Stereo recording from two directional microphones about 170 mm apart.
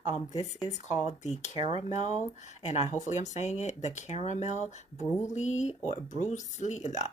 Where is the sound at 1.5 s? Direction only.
25° right (ahead or behind).